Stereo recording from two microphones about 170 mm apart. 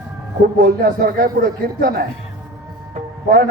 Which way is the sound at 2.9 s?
55° right (ahead or behind).